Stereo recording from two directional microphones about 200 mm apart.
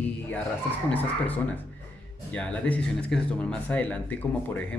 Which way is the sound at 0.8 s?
10° left (ahead or behind).